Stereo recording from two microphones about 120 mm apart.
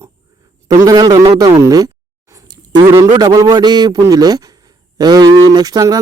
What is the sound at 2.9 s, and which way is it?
A man's voice, 30° right (ahead or behind).